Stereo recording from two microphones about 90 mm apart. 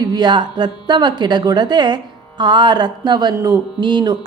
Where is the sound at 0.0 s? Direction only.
50° right (ahead or behind).